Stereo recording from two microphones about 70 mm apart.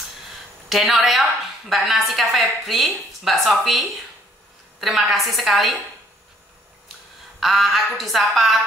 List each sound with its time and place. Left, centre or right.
0.7 s a woman's voice: centre
7.3 s a woman's voice: centre